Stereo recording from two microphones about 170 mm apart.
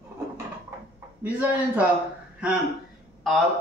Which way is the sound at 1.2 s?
10° right (ahead or behind).